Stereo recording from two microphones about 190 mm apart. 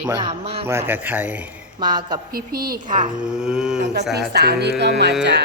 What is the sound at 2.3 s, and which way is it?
Speech, 50° right (ahead or behind).